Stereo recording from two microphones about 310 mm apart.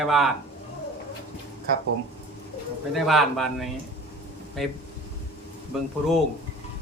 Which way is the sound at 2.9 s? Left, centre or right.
Centre.